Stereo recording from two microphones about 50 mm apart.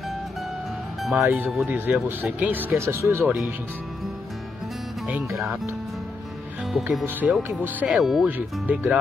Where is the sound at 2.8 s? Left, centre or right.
Right.